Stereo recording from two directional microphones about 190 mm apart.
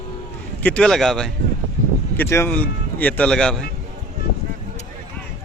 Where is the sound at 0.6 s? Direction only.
5° left (ahead or behind).